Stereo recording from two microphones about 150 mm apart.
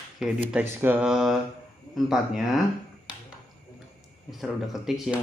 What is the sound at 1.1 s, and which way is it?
Speech, centre (ahead or behind).